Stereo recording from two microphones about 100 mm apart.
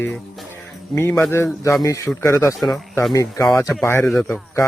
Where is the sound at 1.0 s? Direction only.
25° left (ahead or behind).